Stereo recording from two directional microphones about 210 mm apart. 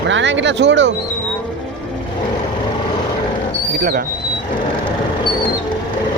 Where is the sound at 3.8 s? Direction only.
45° right (ahead or behind).